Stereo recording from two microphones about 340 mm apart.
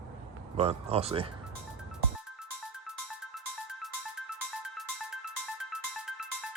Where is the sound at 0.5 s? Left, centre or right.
Centre.